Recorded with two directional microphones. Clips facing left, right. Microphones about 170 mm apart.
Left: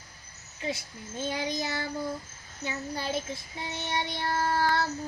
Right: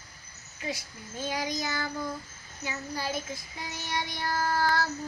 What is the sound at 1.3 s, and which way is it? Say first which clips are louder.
Child singing: even; 25° left (ahead or behind).